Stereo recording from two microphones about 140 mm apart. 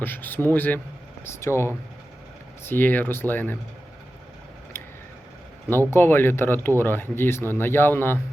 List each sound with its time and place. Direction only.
0.0 s speech: 15° left (ahead or behind)
4.7 s a sound: 20° left (ahead or behind)
5.9 s speech: 15° left (ahead or behind)